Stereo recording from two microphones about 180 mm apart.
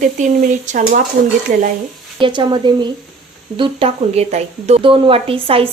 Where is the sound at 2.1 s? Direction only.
25° right (ahead or behind).